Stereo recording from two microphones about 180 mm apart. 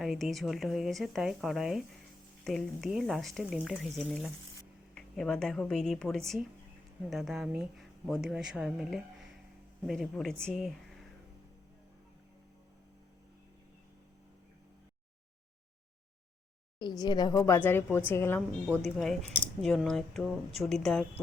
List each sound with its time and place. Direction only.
0.0 s speech: centre (ahead or behind)
17.0 s a woman's voice: 20° left (ahead or behind); by 21.0 s 5° left (ahead or behind)